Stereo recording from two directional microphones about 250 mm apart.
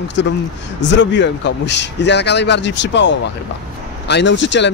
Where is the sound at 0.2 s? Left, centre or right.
Left.